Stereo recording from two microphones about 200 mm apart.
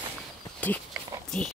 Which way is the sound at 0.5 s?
10° left (ahead or behind).